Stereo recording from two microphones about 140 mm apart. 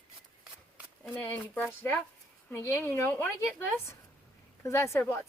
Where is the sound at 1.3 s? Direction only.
10° left (ahead or behind).